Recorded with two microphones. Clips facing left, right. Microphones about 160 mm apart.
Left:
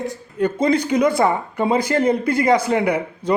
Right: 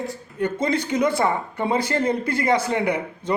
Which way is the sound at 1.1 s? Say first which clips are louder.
Left 4 dB; 15° left (ahead or behind).